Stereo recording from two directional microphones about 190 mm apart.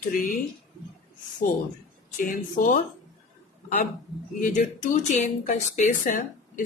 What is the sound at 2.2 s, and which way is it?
Speech, 45° left (ahead or behind).